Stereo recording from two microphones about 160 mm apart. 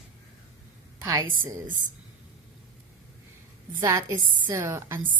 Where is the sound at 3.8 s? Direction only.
20° right (ahead or behind).